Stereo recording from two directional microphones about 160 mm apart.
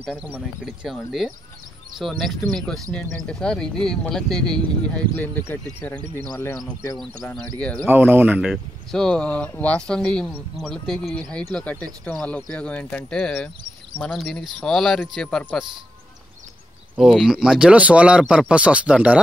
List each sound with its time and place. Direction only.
0.1 s speech: 5° right (ahead or behind)
6.3 s speech: 25° left (ahead or behind)
7.5 s speech: 5° left (ahead or behind)
7.9 s speech: 10° right (ahead or behind)
8.9 s speech: 5° left (ahead or behind)
16.9 s speech: centre (ahead or behind)